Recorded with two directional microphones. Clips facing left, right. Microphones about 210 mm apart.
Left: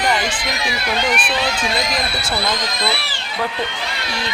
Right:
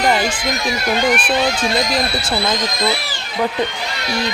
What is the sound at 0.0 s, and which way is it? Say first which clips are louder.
Speech: right 3 dB; 40° right (ahead or behind).